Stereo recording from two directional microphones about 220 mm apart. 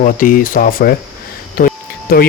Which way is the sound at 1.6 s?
45° left (ahead or behind).